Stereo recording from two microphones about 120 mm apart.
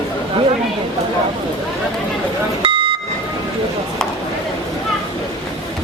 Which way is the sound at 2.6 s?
45° right (ahead or behind).